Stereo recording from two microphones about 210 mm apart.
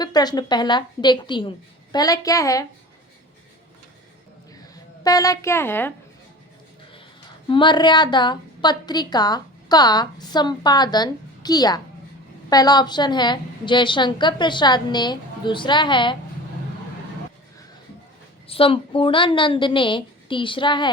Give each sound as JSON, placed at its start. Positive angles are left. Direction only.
{"t": 0.0, "sound": "a woman's voice", "side_deg": 20}
{"t": 4.7, "sound": "a woman's voice", "side_deg": 15}
{"t": 7.4, "sound": "a woman's voice", "side_deg": 20}
{"t": 18.4, "sound": "a woman's voice", "side_deg": 25}